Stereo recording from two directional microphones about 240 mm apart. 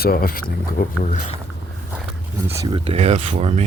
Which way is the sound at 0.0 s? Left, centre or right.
Left.